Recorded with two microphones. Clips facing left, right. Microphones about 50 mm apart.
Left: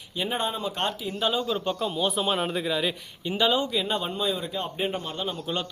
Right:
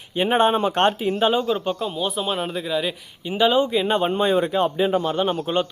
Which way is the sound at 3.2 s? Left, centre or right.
Centre.